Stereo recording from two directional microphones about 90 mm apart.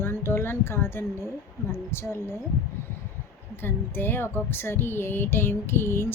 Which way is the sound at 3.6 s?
25° left (ahead or behind).